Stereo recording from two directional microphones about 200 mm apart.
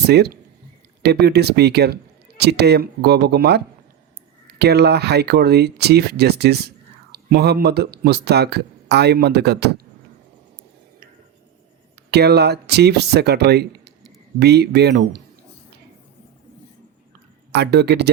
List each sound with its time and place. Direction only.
0.0 s speech: 55° right (ahead or behind)
12.1 s speech: 55° right (ahead or behind)
17.5 s speech: 55° right (ahead or behind)